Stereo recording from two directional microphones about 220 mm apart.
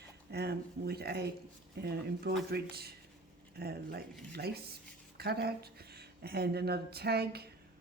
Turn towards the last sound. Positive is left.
turn(degrees=-45)  # may be behind; listen again after turning